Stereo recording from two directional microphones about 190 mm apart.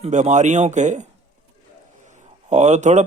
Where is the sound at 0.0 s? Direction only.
40° right (ahead or behind).